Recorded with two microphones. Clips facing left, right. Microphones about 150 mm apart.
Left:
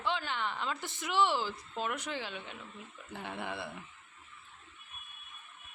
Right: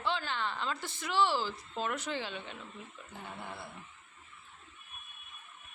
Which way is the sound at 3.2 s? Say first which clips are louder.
Left 5 dB; 85° left.